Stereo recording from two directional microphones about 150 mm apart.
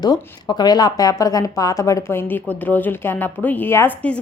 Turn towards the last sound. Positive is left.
turn(degrees=10)  # may be behind; listen again after turning